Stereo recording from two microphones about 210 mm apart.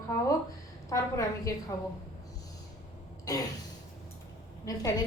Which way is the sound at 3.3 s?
15° left (ahead or behind).